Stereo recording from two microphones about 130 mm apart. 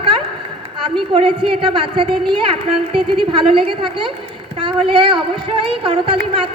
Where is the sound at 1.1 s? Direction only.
40° right (ahead or behind).